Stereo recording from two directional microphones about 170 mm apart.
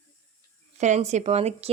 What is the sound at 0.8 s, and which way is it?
Speech, 40° right (ahead or behind).